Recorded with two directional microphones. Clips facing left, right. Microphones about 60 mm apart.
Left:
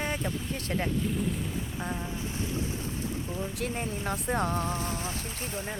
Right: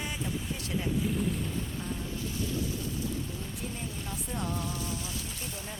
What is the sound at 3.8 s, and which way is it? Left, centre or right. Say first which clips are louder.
Speech: left 6 dB; left.